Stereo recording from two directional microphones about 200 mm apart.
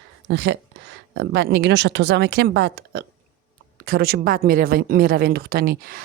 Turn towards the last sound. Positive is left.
turn(degrees=-50)  # may be behind; listen again after turning